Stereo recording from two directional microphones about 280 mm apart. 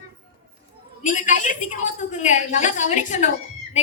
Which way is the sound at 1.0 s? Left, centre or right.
Left.